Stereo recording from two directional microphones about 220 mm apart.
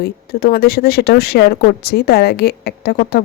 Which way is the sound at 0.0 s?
45° left (ahead or behind).